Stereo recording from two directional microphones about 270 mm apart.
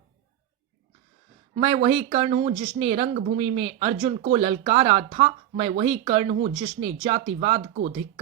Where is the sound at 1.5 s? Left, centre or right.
Right.